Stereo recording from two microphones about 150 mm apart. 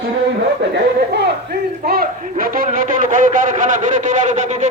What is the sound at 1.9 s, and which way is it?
A man's voice, 80° right.